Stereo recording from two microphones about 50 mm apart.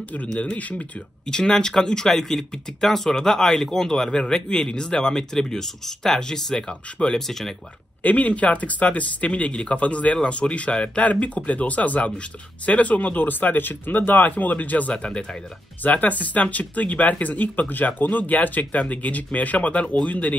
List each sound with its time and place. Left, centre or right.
0.4 s speech: left
1.2 s speech: centre
7.2 s speech: centre
8.0 s speech: left
15.8 s speech: left